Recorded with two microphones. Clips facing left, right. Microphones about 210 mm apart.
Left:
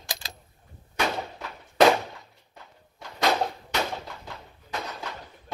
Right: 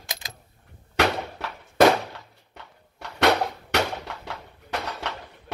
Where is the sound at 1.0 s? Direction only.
80° right.